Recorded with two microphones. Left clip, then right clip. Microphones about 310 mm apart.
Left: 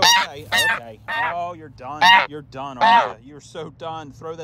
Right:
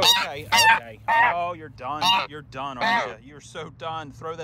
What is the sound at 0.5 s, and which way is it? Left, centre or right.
Goose, centre.